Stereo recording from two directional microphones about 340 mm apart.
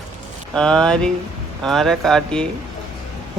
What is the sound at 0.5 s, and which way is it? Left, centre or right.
Speech, centre.